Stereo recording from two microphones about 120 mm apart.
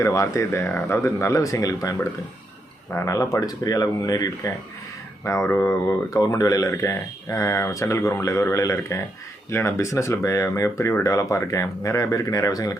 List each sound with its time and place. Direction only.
0.0 s speech: 25° left (ahead or behind)